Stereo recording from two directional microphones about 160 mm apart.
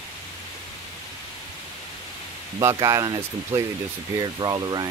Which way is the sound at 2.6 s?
20° right (ahead or behind).